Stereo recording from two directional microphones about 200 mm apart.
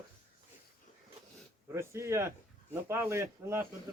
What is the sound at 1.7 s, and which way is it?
Speech, 15° right (ahead or behind).